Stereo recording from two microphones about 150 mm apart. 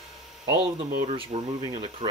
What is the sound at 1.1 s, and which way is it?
Speech, 35° right (ahead or behind).